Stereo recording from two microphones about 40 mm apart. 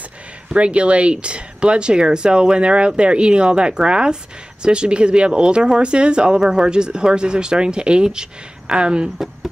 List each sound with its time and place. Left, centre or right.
0.5 s speech: right